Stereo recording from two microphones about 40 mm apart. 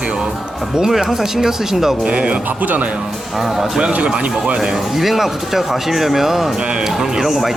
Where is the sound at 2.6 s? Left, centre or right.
Right.